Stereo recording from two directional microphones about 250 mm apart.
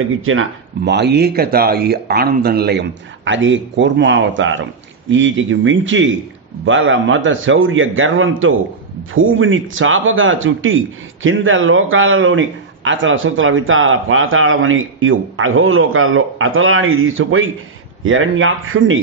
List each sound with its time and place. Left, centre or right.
0.2 s a man's voice: right